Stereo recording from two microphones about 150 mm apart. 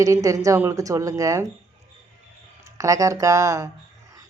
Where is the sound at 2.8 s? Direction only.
20° right (ahead or behind).